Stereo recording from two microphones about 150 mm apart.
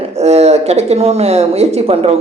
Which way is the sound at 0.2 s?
45° right (ahead or behind).